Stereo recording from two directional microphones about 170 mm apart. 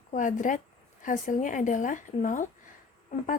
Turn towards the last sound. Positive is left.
turn(degrees=45)  # may be behind; listen again after turning